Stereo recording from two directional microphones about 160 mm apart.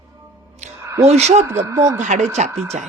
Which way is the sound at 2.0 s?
50° right (ahead or behind).